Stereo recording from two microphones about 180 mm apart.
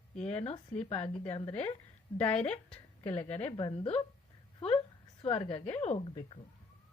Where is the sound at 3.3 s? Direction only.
35° left (ahead or behind).